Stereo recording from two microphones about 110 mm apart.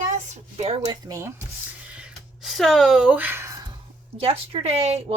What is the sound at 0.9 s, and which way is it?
Speech, 30° right (ahead or behind).